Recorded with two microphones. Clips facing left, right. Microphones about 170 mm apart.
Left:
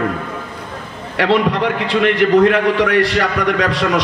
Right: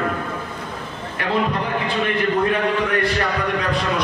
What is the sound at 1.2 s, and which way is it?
A man's voice, 85° left.